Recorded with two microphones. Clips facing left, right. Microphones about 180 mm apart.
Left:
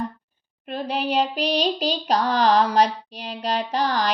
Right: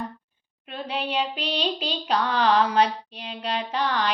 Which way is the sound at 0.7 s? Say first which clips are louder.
Left 4 dB; 40° left (ahead or behind).